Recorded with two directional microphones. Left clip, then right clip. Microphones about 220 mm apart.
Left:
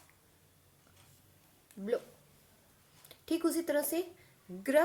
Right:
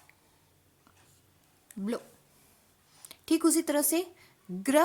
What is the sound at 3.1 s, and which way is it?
Speech, 50° right (ahead or behind).